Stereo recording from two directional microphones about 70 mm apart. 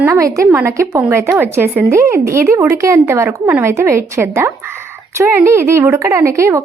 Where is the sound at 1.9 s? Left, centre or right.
Right.